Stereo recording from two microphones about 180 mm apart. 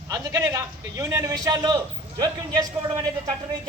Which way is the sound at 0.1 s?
20° right (ahead or behind).